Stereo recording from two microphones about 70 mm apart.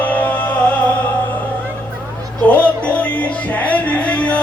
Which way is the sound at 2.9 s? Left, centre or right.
Centre.